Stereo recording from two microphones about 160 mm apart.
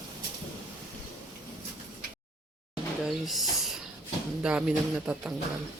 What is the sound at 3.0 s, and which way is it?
Speech, centre (ahead or behind).